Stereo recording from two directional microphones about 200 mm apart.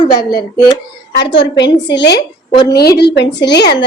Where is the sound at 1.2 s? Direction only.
60° left (ahead or behind).